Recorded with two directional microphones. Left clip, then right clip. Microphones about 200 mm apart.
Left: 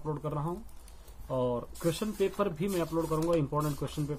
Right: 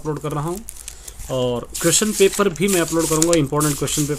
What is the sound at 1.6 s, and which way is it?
Speech, 35° right (ahead or behind).